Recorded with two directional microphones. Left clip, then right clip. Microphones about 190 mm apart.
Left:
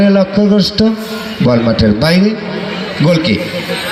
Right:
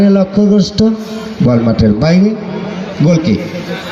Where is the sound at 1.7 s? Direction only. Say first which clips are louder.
Left 1 dB; 50° right (ahead or behind).